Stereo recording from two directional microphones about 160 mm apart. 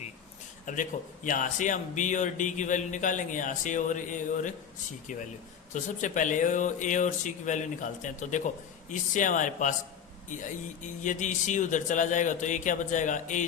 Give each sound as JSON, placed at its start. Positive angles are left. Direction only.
{"t": 0.6, "sound": "a man's voice", "side_deg": 55}
{"t": 5.7, "sound": "a man's voice", "side_deg": 50}
{"t": 11.0, "sound": "a man's voice", "side_deg": 50}